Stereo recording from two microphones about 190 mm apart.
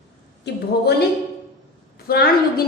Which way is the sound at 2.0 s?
55° left (ahead or behind).